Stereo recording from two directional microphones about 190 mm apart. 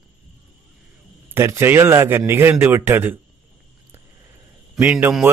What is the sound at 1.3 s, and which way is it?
A man's voice, 15° right (ahead or behind).